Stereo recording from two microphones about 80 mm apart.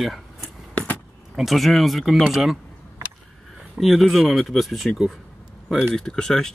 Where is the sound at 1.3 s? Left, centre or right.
Centre.